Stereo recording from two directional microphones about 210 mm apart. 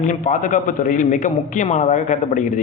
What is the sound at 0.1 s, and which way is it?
A man's voice, 35° left (ahead or behind).